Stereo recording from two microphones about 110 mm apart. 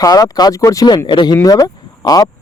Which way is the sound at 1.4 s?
35° left (ahead or behind).